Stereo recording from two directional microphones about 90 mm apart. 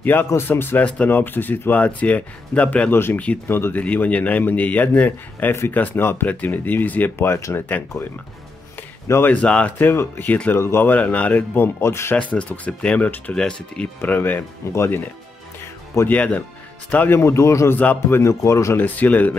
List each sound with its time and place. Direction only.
0.0 s a man's voice: 25° left (ahead or behind)
2.9 s a man's voice: 25° left (ahead or behind)
3.2 s speech: 15° left (ahead or behind)
3.5 s a man's voice: 25° left (ahead or behind)
9.0 s speech: 30° left (ahead or behind)
9.3 s speech: 15° left (ahead or behind)
9.8 s a man's voice: 25° left (ahead or behind)
12.4 s a man's voice: 15° left (ahead or behind); by 15.0 s 30° left (ahead or behind)
16.1 s a man's voice: 15° left (ahead or behind)
17.2 s a man's voice: 35° left (ahead or behind)
17.7 s a man's voice: 20° left (ahead or behind)
18.2 s a man's voice: 35° left (ahead or behind)
18.8 s a man's voice: 20° left (ahead or behind)